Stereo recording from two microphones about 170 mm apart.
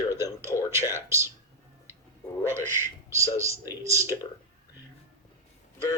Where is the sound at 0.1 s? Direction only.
15° right (ahead or behind).